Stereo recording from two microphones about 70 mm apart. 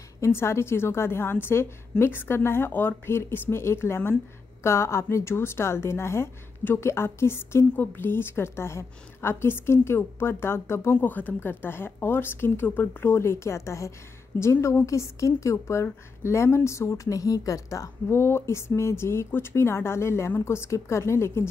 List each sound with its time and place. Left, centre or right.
0.2 s a woman's voice: left
11.0 s a woman's voice: left
18.1 s a woman's voice: left